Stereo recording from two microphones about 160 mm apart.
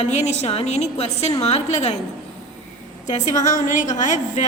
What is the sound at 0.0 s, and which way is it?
A woman's voice, 45° left (ahead or behind).